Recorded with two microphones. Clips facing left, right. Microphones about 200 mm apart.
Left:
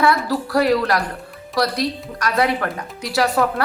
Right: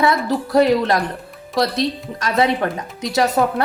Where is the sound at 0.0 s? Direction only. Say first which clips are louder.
Right 1 dB; 20° right (ahead or behind).